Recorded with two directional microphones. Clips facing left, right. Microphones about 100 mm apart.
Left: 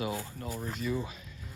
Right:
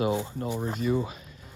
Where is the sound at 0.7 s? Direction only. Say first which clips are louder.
Right 6 dB; 50° right (ahead or behind).